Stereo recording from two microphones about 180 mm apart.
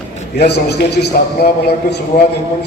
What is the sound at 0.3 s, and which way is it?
A man's voice, 65° left (ahead or behind).